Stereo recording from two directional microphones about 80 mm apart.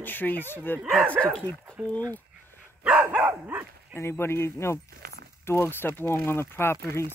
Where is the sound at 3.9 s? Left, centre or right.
Left.